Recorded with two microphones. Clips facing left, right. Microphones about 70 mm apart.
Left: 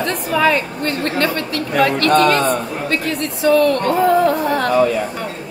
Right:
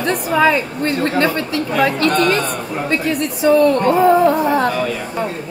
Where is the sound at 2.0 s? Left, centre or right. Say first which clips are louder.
Left 2 dB; left.